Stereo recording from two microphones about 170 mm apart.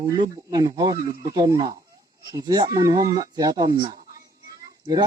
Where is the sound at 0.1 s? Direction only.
25° right (ahead or behind).